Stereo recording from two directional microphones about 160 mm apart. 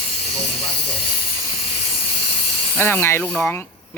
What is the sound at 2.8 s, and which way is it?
Speech, 10° left (ahead or behind).